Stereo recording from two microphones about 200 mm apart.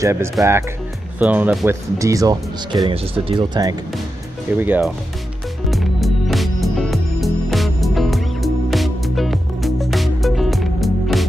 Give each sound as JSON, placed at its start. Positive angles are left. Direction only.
{"t": 0.0, "sound": "speech", "side_deg": -15}
{"t": 1.7, "sound": "speech", "side_deg": -15}
{"t": 4.6, "sound": "speech", "side_deg": -10}
{"t": 5.7, "sound": "music", "side_deg": 0}